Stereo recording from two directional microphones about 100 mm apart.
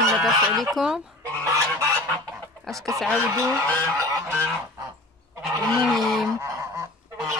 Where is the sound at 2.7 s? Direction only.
35° right (ahead or behind).